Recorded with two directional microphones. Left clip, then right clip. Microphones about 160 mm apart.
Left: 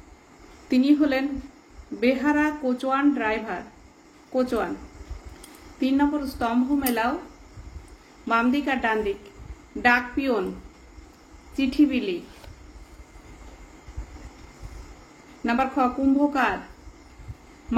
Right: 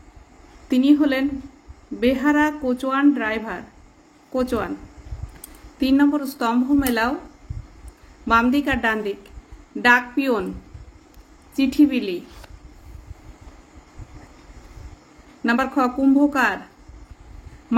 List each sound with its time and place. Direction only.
0.7 s speech: 50° right (ahead or behind)
5.8 s a woman's voice: 60° right (ahead or behind)
8.3 s a woman's voice: 60° right (ahead or behind)
11.5 s a woman's voice: 60° right (ahead or behind)
15.4 s a woman's voice: 55° right (ahead or behind)